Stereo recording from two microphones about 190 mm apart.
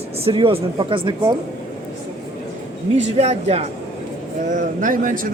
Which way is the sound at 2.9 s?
35° right (ahead or behind).